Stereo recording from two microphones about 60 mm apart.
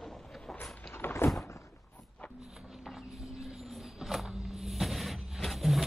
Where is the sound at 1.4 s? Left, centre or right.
Left.